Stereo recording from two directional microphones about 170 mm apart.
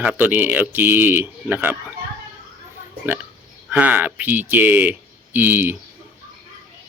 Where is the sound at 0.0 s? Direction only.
10° right (ahead or behind).